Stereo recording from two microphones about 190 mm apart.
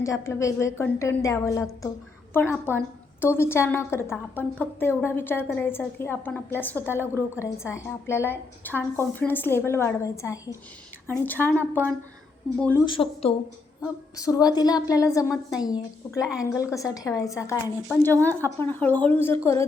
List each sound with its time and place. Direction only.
0.0 s a woman's voice: 15° left (ahead or behind)
12.8 s a woman's voice: 25° left (ahead or behind); by 19.4 s 10° left (ahead or behind)